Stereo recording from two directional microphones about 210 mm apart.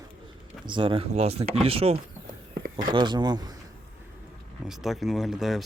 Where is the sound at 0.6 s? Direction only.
25° right (ahead or behind).